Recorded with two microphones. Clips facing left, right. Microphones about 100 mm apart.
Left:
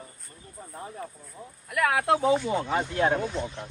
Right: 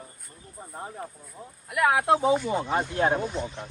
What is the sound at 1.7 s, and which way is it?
Speech, 10° right (ahead or behind).